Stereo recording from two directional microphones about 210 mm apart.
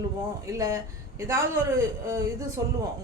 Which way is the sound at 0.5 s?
15° right (ahead or behind).